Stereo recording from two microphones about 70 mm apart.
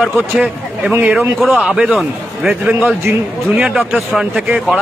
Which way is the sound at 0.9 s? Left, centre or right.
Right.